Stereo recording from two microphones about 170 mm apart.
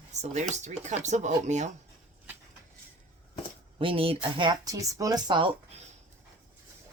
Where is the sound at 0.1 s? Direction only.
40° right (ahead or behind).